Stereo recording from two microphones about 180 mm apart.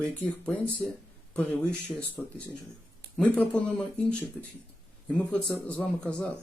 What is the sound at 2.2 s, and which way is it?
Speech, 5° left (ahead or behind).